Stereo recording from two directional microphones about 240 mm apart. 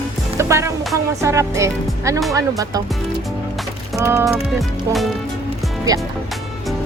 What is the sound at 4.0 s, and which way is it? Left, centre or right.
Speech, centre.